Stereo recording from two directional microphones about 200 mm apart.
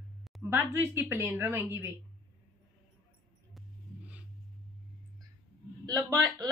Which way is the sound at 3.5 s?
5° right (ahead or behind).